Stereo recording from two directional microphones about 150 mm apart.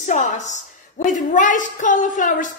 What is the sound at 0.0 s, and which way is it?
Speech, 55° left (ahead or behind).